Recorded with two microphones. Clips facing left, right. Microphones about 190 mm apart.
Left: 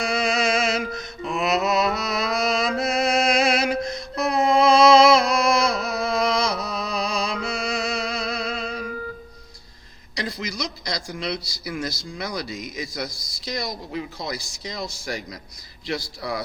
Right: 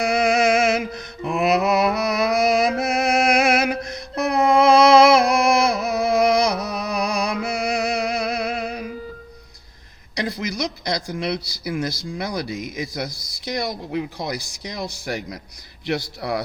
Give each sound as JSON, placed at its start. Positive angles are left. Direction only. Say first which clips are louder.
{"t": 0.0, "sound": "mantra", "louder": "right 5 dB", "side_deg": -60}
{"t": 10.2, "sound": "a sound", "louder": "right 4 dB", "side_deg": -60}
{"t": 11.1, "sound": "speech", "louder": "right 4 dB", "side_deg": -55}